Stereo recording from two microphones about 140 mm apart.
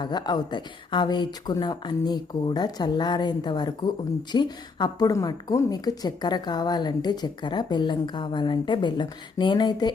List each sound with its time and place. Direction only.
0.0 s a woman's voice: 30° left (ahead or behind)